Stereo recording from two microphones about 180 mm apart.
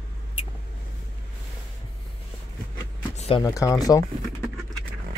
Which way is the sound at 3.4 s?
20° left (ahead or behind).